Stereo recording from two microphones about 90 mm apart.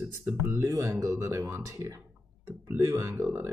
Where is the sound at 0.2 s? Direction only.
20° right (ahead or behind).